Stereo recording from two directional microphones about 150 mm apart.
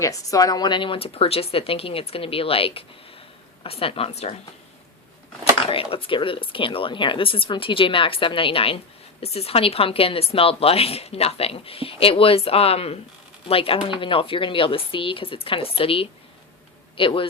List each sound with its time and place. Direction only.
0.0 s a woman's voice: 20° left (ahead or behind); by 4.4 s 45° left (ahead or behind)
5.6 s a woman's voice: 40° left (ahead or behind)